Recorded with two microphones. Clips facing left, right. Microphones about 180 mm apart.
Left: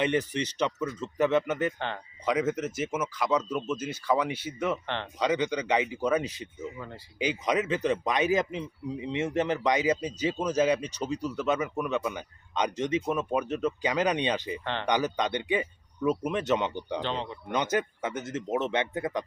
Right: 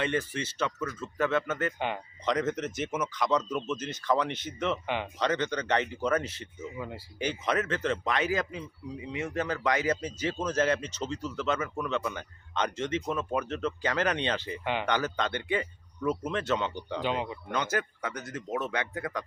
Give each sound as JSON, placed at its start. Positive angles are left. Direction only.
{"t": 0.0, "sound": "a man's voice", "side_deg": 20}
{"t": 6.7, "sound": "speech", "side_deg": -10}
{"t": 7.2, "sound": "a man's voice", "side_deg": 15}
{"t": 14.6, "sound": "speech", "side_deg": -10}
{"t": 14.8, "sound": "a man's voice", "side_deg": 15}
{"t": 17.0, "sound": "speech", "side_deg": -10}
{"t": 17.5, "sound": "speech", "side_deg": 20}